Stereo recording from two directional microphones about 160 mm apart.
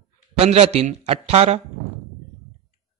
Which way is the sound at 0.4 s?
40° right (ahead or behind).